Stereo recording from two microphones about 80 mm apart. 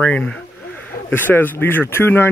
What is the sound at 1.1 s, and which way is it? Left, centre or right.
Speech, left.